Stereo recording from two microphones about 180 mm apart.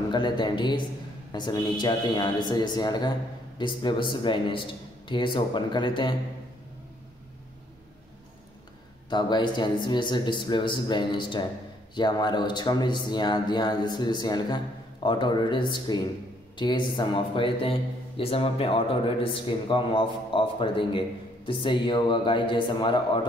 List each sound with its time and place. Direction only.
0.1 s a man's voice: 25° left (ahead or behind)
9.1 s a man's voice: 25° left (ahead or behind)